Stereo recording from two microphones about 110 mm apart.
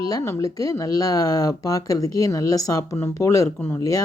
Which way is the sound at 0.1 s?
30° left (ahead or behind).